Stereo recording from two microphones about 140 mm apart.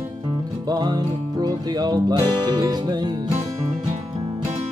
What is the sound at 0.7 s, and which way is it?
Music, 30° right (ahead or behind).